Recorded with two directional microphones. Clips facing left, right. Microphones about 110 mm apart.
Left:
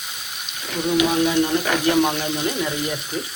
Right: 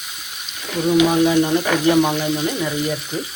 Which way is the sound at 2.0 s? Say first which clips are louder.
Right 2 dB; 5° right (ahead or behind).